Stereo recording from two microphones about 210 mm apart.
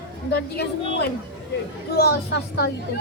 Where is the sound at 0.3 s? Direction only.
50° left (ahead or behind).